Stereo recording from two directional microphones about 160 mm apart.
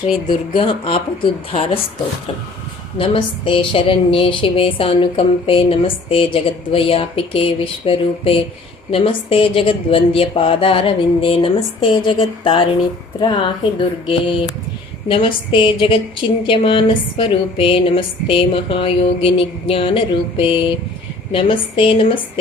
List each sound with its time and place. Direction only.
0.3 s a woman's voice: 35° left (ahead or behind)
3.0 s a woman's voice: 35° left (ahead or behind)